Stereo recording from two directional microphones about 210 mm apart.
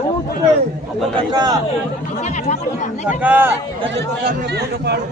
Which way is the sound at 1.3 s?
20° right (ahead or behind).